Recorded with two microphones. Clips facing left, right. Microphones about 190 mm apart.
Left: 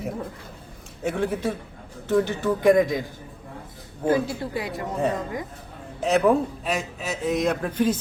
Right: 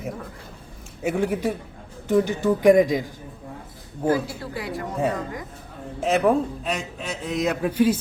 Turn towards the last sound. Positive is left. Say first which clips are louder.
# right 3 dB
turn(degrees=-10)  # may be behind; listen again after turning